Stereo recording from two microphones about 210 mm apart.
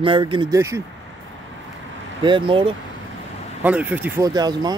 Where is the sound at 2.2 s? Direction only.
25° right (ahead or behind).